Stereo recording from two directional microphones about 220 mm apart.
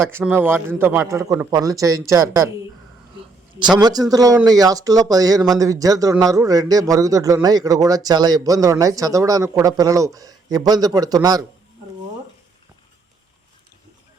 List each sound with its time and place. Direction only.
0.1 s speech: 10° right (ahead or behind)
3.8 s speech: 20° right (ahead or behind)